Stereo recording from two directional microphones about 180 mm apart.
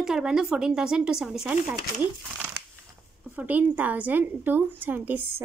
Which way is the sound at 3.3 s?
10° right (ahead or behind).